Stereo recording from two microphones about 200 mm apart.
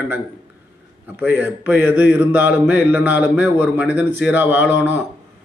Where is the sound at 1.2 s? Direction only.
10° right (ahead or behind).